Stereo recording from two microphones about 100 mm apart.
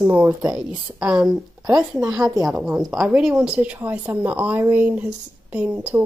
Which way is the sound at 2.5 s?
15° right (ahead or behind).